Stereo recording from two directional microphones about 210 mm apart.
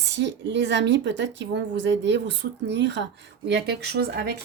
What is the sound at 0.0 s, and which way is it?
A woman's voice, 55° right (ahead or behind).